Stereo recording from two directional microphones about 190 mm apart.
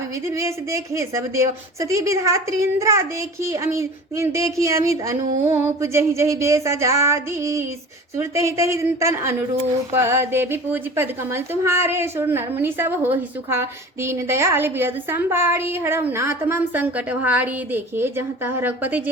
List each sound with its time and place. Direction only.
0.3 s a woman's voice: 15° right (ahead or behind)
5.2 s a sound: 40° right (ahead or behind)
5.5 s a woman's voice: 15° right (ahead or behind)